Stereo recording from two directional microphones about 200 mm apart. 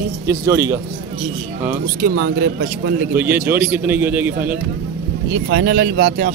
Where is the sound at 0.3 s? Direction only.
15° right (ahead or behind).